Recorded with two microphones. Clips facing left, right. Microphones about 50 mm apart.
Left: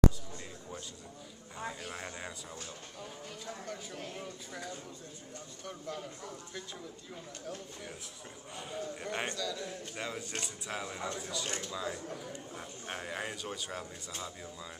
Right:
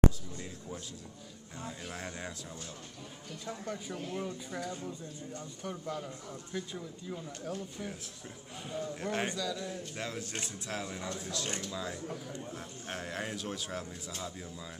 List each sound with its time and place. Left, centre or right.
1.9 s a man's voice: centre
3.4 s speech: centre
6.5 s a man's voice: centre
9.3 s speech: centre
9.6 s a man's voice: centre